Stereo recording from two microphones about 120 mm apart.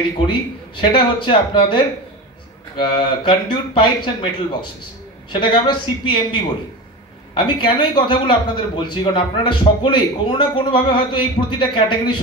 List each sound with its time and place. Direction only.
0.3 s a man's voice: 45° left (ahead or behind)